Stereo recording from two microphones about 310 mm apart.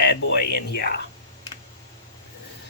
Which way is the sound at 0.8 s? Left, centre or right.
Left.